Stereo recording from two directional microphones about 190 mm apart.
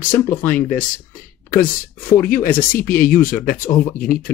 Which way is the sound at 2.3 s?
50° left (ahead or behind).